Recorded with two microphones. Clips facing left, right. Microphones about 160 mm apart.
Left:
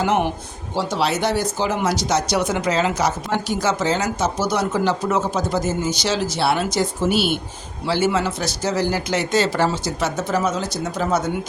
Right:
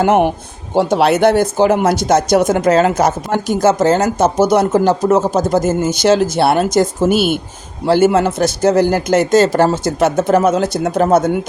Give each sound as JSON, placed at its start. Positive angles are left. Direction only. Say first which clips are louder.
{"t": 0.0, "sound": "speech", "louder": "right 7 dB", "side_deg": -55}